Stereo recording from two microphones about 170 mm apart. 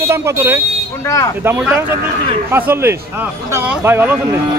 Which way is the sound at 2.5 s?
15° right (ahead or behind).